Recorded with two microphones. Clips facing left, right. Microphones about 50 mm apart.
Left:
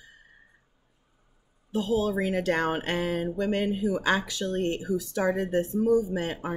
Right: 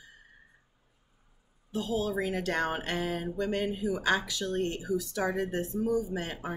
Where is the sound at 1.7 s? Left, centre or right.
Left.